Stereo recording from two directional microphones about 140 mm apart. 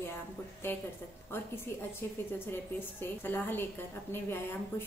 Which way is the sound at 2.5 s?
15° left (ahead or behind).